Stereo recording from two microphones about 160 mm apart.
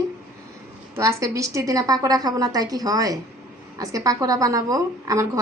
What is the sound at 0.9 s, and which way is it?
A woman's voice, 20° right (ahead or behind).